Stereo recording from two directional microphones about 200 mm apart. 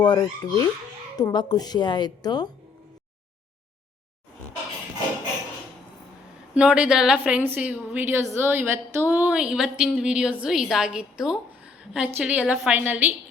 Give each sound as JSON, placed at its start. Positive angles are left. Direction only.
{"t": 0.0, "sound": "a woman's voice", "side_deg": 20}
{"t": 6.5, "sound": "a woman's voice", "side_deg": -5}